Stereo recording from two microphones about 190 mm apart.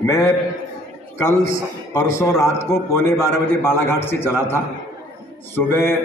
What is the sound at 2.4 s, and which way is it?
A man's voice, 15° left (ahead or behind).